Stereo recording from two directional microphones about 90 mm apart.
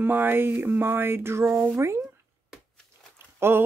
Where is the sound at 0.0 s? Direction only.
25° right (ahead or behind).